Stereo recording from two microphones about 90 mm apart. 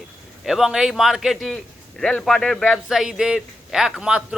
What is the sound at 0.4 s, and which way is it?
A man's voice, 5° right (ahead or behind).